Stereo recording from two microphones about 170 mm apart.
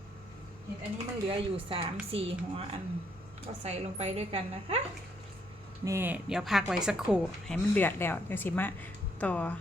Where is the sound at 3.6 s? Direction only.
40° right (ahead or behind).